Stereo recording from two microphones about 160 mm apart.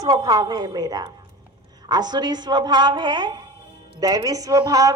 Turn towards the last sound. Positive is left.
turn(degrees=-25)  # may be behind; listen again after turning